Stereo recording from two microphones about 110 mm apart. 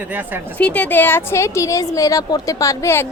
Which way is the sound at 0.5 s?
15° left (ahead or behind).